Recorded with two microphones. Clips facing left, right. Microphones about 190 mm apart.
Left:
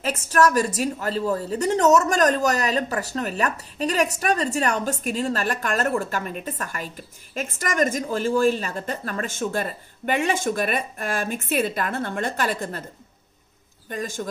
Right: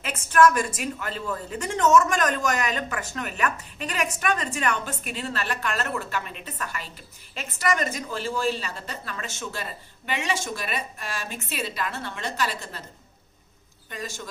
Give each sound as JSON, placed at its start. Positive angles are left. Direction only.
{"t": 0.0, "sound": "a woman's voice", "side_deg": 40}
{"t": 13.8, "sound": "a woman's voice", "side_deg": 50}